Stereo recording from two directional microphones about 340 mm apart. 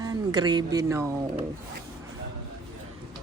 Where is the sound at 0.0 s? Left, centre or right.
Centre.